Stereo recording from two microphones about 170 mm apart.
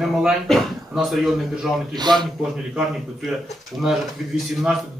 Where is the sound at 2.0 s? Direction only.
25° right (ahead or behind).